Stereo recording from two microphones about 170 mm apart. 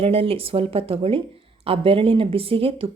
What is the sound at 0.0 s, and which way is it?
Speech, 35° right (ahead or behind).